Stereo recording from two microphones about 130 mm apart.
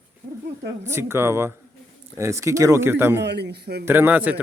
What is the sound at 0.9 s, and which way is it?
A man's voice, 20° right (ahead or behind).